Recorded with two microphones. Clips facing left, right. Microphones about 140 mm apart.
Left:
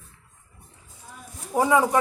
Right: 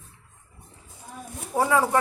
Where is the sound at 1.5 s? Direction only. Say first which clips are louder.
Left 2 dB; 15° left (ahead or behind).